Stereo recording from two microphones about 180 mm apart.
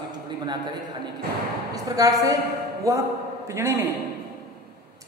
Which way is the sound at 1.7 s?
20° right (ahead or behind).